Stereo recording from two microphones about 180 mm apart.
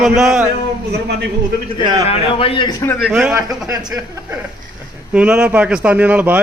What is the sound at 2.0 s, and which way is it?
Speech, 30° left (ahead or behind).